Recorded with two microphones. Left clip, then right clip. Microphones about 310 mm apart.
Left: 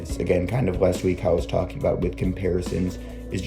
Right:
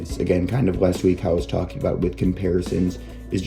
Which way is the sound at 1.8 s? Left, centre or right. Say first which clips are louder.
Right 1 dB; centre.